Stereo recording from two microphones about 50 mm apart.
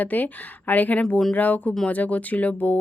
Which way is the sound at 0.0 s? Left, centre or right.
Left.